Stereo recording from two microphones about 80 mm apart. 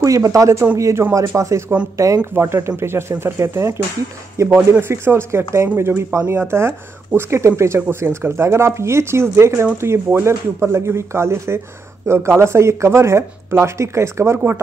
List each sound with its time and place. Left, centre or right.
0.0 s speech: right